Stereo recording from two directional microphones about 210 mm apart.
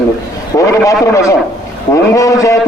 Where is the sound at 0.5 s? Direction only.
15° left (ahead or behind).